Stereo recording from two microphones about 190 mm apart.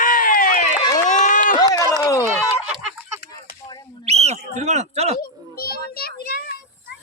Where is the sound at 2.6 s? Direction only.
5° right (ahead or behind).